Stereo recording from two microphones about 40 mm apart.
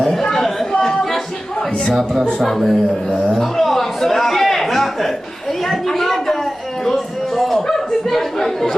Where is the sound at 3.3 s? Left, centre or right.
Centre.